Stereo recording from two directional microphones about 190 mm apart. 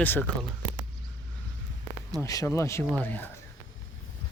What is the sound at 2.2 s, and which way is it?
Speech, 15° left (ahead or behind).